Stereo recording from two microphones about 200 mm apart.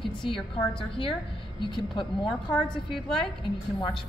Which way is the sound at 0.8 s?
25° left (ahead or behind).